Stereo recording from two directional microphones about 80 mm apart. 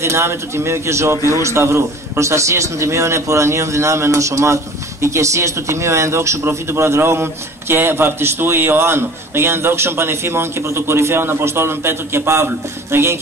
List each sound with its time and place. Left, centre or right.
0.0 s a man's voice: right